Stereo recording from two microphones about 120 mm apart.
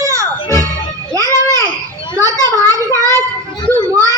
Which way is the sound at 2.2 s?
25° right (ahead or behind).